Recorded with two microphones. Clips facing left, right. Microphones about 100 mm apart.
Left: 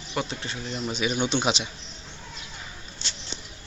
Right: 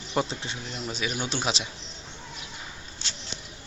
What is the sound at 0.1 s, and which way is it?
Speech, 25° right (ahead or behind).